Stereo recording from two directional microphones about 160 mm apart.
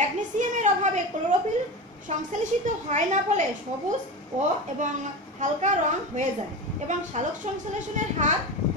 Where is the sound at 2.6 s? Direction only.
50° right (ahead or behind).